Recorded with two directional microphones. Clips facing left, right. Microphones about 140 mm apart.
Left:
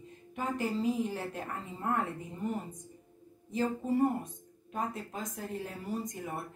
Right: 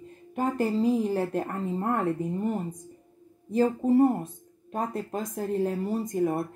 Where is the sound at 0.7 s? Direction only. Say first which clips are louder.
Right 7 dB; 35° right (ahead or behind).